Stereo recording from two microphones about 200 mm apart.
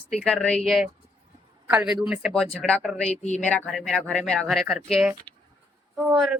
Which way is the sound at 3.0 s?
35° left (ahead or behind).